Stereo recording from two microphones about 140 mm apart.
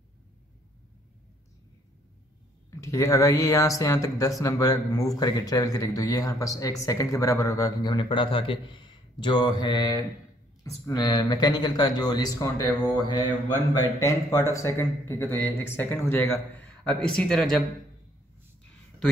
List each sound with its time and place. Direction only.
2.7 s a man's voice: 20° left (ahead or behind)
16.8 s speech: 5° left (ahead or behind)